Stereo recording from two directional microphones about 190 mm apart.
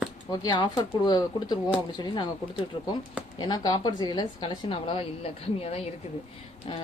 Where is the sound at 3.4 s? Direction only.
20° left (ahead or behind).